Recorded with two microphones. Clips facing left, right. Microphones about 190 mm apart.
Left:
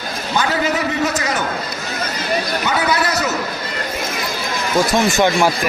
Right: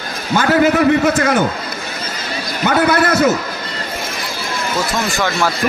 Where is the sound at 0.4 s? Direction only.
50° right (ahead or behind).